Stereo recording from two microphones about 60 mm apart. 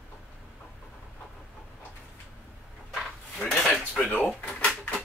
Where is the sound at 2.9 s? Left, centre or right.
Centre.